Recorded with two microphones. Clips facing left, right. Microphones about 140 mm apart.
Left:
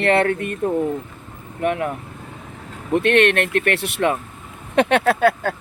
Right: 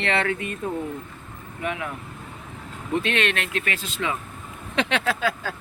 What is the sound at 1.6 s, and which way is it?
Speech, 55° left (ahead or behind).